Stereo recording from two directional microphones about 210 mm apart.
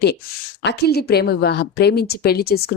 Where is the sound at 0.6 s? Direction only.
50° left (ahead or behind).